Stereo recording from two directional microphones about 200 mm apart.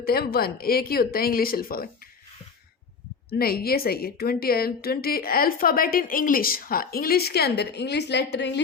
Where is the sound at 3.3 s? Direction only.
50° left (ahead or behind).